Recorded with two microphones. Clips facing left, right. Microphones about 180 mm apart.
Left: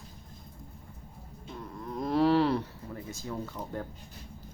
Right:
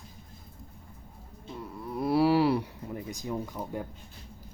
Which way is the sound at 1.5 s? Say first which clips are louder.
Right 2 dB; 10° right (ahead or behind).